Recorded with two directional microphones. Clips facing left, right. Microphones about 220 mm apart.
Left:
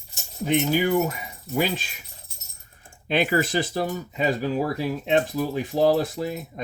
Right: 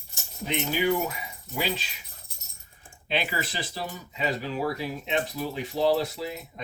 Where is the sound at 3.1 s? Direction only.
50° left (ahead or behind).